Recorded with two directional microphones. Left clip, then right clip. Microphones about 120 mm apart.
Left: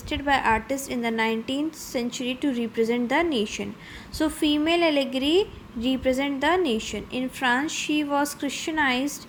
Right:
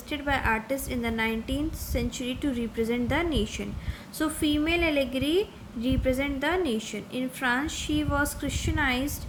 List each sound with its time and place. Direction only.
0.1 s a woman's voice: 30° left (ahead or behind)